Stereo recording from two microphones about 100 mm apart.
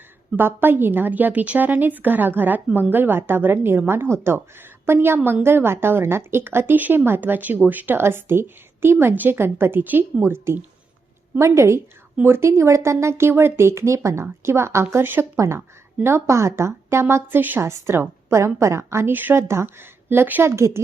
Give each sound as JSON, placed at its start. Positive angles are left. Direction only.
{"t": 0.3, "sound": "a woman's voice", "side_deg": -20}